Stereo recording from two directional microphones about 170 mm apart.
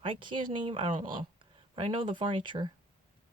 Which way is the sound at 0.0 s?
30° right (ahead or behind).